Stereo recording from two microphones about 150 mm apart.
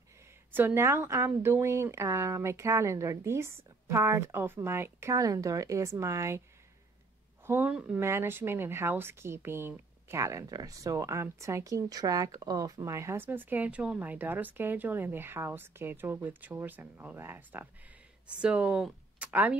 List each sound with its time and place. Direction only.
0.5 s speech: 15° right (ahead or behind)
7.4 s speech: 10° right (ahead or behind)